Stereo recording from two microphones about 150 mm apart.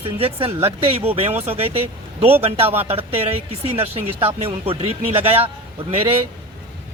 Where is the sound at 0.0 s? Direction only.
40° right (ahead or behind).